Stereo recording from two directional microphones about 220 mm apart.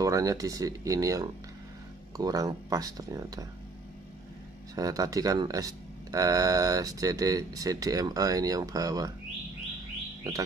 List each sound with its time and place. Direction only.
0.0 s speech: 15° right (ahead or behind)
4.7 s speech: 15° right (ahead or behind)